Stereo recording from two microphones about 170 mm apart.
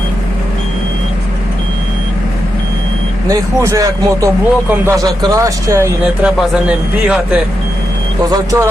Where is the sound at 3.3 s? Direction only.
20° right (ahead or behind).